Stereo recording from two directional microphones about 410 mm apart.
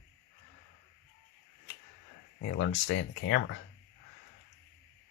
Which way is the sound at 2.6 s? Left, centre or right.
Left.